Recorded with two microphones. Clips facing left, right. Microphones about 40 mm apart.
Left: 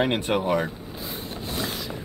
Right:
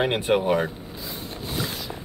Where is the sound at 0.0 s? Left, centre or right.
Centre.